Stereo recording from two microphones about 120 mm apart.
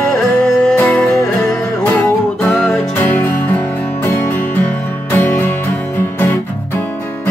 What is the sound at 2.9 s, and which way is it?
Music, 15° left (ahead or behind).